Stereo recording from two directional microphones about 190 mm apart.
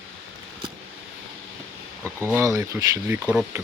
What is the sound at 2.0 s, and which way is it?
Speech, 10° right (ahead or behind).